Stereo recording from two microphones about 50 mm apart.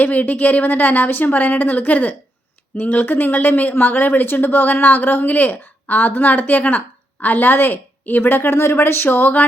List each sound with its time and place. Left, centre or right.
0.0 s speech: left